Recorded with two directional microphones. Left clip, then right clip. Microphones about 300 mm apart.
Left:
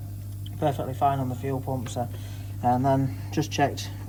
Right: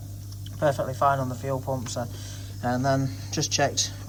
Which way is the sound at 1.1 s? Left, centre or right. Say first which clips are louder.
Right 3 dB; right.